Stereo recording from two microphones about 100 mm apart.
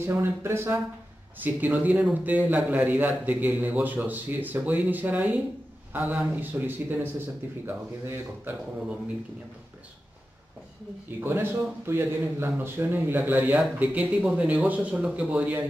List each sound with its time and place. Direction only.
0.0 s a man's voice: 25° right (ahead or behind)
11.1 s a man's voice: 20° right (ahead or behind)